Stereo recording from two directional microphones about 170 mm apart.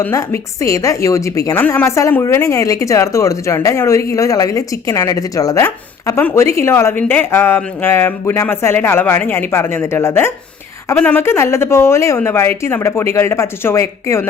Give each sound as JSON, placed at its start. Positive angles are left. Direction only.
{"t": 0.0, "sound": "a woman's voice", "side_deg": 15}